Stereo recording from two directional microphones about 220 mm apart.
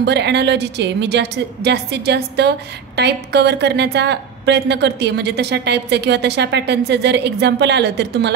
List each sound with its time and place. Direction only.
0.0 s a woman's voice: 50° right (ahead or behind)